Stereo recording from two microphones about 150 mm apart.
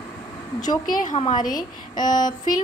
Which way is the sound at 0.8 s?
60° left (ahead or behind).